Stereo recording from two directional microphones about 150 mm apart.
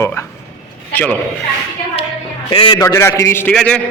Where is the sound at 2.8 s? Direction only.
20° left (ahead or behind).